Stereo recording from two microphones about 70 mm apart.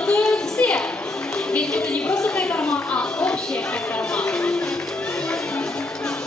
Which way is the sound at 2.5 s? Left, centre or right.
Centre.